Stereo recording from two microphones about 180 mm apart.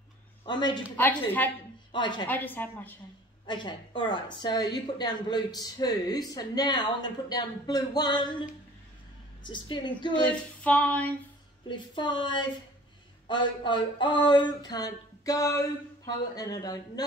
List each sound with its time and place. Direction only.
0.5 s a woman's voice: 25° left (ahead or behind)
1.9 s a woman's voice: 25° left (ahead or behind)
2.2 s a sound: 10° left (ahead or behind)
3.4 s a woman's voice: 25° left (ahead or behind)
10.2 s a sound: 5° left (ahead or behind)
11.7 s a woman's voice: 25° left (ahead or behind)